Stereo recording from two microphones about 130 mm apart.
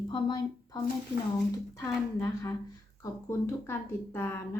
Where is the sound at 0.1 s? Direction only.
35° left (ahead or behind).